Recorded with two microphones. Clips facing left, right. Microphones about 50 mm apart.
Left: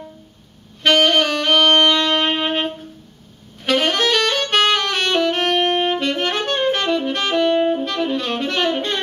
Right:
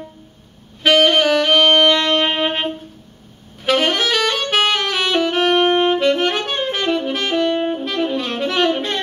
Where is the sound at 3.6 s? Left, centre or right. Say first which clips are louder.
Right 1 dB; centre.